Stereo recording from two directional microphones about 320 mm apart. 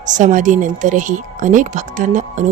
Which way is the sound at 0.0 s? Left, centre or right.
Right.